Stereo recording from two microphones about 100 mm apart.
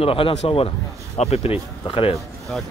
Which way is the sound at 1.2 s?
90° left.